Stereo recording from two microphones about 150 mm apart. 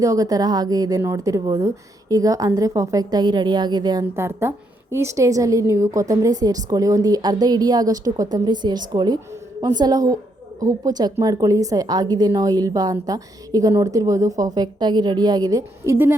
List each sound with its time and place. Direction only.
0.0 s a woman's voice: 25° right (ahead or behind)
4.1 s a woman's voice: 15° right (ahead or behind)